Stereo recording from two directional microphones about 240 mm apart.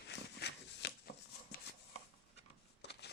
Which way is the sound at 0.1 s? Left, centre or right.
Left.